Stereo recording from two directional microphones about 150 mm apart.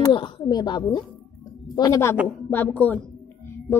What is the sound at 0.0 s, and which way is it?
A woman's voice, 30° left (ahead or behind).